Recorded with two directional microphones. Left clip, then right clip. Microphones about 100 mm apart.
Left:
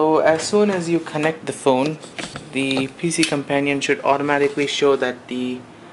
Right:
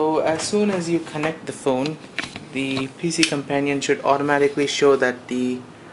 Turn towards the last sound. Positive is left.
turn(degrees=-5)  # may be behind; listen again after turning